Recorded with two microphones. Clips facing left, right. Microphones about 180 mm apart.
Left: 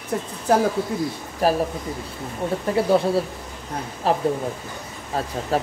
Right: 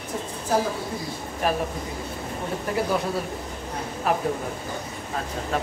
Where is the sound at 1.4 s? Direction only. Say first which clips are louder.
Left 5 dB; 35° left (ahead or behind).